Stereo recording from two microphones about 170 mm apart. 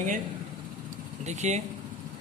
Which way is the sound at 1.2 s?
45° right (ahead or behind).